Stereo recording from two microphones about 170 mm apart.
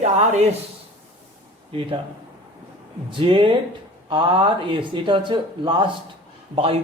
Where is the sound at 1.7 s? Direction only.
30° right (ahead or behind).